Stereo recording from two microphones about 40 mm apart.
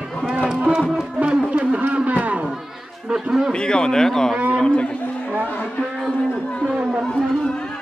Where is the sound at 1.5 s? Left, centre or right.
Right.